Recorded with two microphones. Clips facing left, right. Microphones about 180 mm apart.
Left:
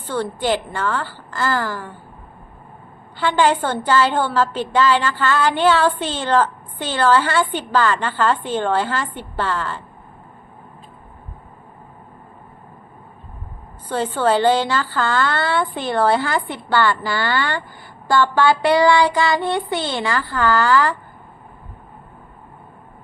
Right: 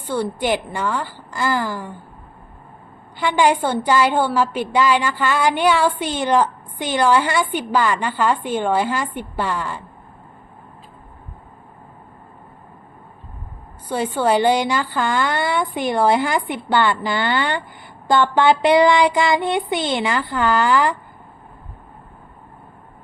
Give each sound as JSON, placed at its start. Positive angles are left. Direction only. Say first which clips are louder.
{"t": 0.0, "sound": "a woman's voice", "louder": "right 1 dB", "side_deg": -10}
{"t": 3.2, "sound": "a woman's voice", "louder": "even", "side_deg": -15}
{"t": 13.8, "sound": "a woman's voice", "louder": "even", "side_deg": -10}
{"t": 18.1, "sound": "child singing", "louder": "right 1 dB", "side_deg": -20}